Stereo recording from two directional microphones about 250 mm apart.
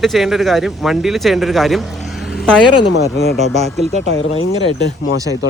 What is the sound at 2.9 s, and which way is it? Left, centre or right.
Speech, left.